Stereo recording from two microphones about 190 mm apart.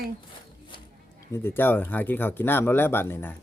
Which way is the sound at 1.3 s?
10° left (ahead or behind).